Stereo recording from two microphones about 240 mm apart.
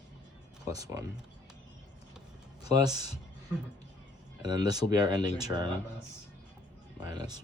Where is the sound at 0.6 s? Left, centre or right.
Centre.